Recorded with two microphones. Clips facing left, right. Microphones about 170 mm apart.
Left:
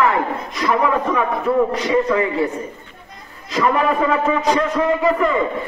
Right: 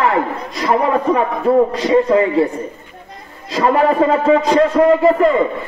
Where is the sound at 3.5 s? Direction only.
35° right (ahead or behind).